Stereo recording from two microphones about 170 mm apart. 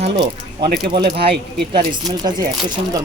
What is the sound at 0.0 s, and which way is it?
Speech, 30° right (ahead or behind).